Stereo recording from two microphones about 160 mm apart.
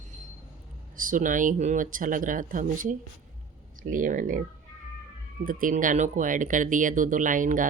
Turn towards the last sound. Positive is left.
turn(degrees=-55)  # may be behind; listen again after turning